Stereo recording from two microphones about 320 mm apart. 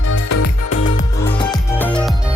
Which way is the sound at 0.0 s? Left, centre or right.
Left.